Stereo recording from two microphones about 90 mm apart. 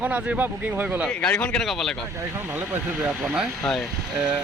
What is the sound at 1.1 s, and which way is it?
Speech, 15° left (ahead or behind).